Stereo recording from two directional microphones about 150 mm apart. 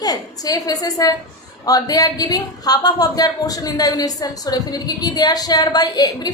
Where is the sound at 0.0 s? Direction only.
25° left (ahead or behind).